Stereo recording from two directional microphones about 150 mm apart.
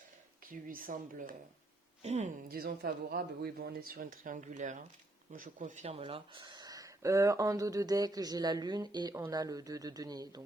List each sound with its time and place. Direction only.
0.4 s speech: 70° right (ahead or behind)
2.0 s a woman's voice: 50° right (ahead or behind)
2.5 s speech: 85° right; by 10.4 s 25° right (ahead or behind)